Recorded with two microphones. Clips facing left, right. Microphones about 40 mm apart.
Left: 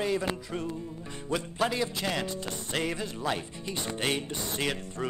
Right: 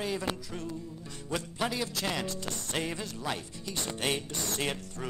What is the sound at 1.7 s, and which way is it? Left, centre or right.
Speech, centre.